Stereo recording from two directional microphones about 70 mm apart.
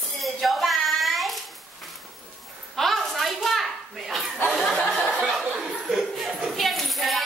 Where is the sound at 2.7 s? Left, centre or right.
Centre.